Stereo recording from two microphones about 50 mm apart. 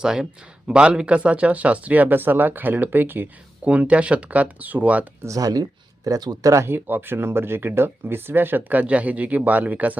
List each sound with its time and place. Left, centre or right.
0.0 s speech: centre; by 2.1 s right
2.1 s speech: right
3.6 s speech: right
6.1 s speech: right
6.7 s speech: right